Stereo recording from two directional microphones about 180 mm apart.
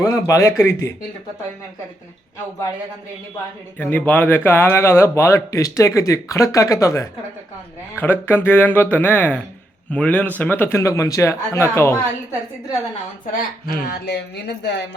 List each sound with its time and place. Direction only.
0.0 s speech: 15° left (ahead or behind)
3.8 s speech: 10° left (ahead or behind)
13.3 s speech: 55° left (ahead or behind); by 14.8 s 75° left (ahead or behind)